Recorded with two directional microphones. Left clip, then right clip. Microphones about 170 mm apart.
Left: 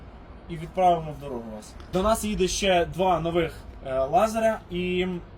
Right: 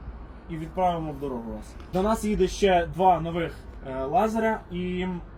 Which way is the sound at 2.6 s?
40° left (ahead or behind).